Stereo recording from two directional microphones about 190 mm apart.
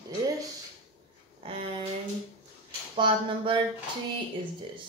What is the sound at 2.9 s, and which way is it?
Speech, 25° right (ahead or behind).